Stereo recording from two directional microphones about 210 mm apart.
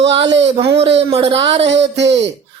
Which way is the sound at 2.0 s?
55° right (ahead or behind).